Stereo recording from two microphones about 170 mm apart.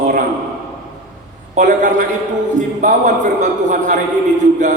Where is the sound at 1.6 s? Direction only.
50° right (ahead or behind).